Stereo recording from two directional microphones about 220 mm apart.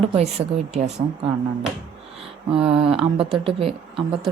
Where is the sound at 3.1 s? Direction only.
25° right (ahead or behind).